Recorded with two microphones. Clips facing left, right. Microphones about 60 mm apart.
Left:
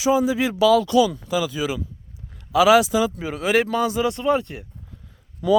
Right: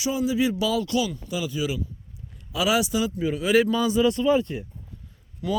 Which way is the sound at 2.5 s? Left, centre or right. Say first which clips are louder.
Left 8 dB; left.